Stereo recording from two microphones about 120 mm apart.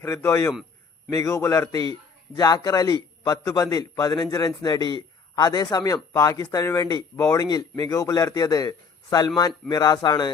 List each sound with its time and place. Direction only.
0.0 s a man's voice: 25° left (ahead or behind)